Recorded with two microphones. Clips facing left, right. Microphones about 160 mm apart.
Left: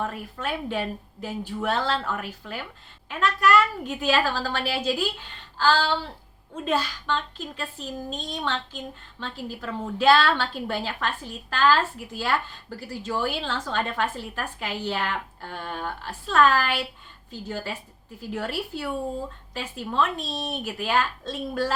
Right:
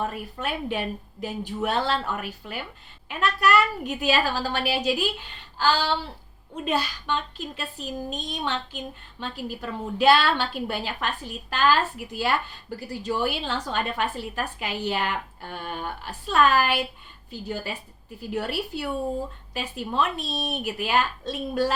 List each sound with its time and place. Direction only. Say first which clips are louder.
0.0 s a woman's voice: right 1 dB; 15° right (ahead or behind)